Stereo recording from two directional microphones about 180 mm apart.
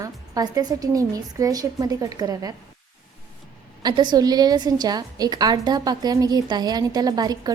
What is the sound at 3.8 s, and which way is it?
A woman's voice, 25° right (ahead or behind).